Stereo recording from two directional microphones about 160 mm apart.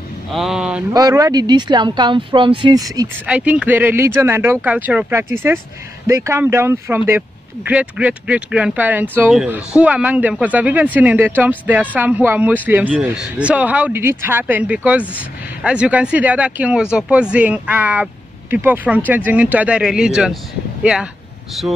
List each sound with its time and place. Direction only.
0.3 s speech: centre (ahead or behind)
0.9 s speech: 20° right (ahead or behind)
3.3 s speech: 10° right (ahead or behind)